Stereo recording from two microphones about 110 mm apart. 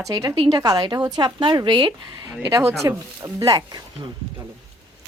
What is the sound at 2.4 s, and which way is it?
Speech, 30° right (ahead or behind).